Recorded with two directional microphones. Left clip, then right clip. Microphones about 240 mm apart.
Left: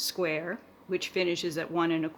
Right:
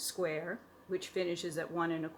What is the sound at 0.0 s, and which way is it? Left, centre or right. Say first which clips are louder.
Speech: left 6 dB; left.